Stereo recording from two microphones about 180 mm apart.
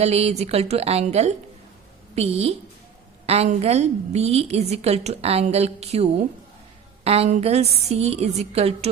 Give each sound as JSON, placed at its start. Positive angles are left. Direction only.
{"t": 0.0, "sound": "a woman's voice", "side_deg": -35}